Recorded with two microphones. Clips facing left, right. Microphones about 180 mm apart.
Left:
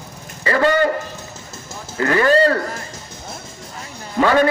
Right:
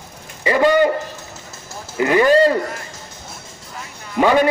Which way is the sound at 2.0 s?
15° right (ahead or behind).